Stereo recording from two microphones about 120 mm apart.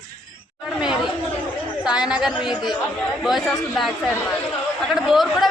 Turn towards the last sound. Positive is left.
turn(degrees=0)  # may be behind; listen again after turning